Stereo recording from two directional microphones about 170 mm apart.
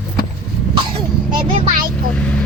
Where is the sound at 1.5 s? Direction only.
50° right (ahead or behind).